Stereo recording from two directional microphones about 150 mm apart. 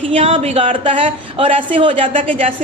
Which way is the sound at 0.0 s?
45° right (ahead or behind).